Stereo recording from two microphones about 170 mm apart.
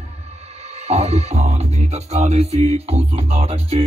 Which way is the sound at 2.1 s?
40° right (ahead or behind).